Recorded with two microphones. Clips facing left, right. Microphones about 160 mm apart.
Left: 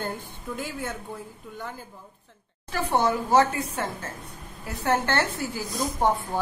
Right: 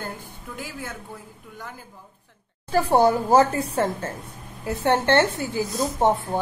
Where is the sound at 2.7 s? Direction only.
35° right (ahead or behind).